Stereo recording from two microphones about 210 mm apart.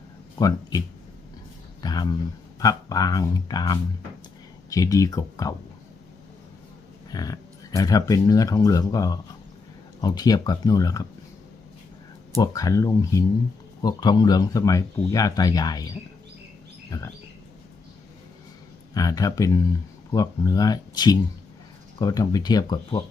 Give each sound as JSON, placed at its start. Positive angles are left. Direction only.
{"t": 0.3, "sound": "speech", "side_deg": 15}
{"t": 1.8, "sound": "speech", "side_deg": 20}
{"t": 7.1, "sound": "speech", "side_deg": 15}
{"t": 12.4, "sound": "speech", "side_deg": 15}
{"t": 16.9, "sound": "speech", "side_deg": 15}
{"t": 18.9, "sound": "speech", "side_deg": 15}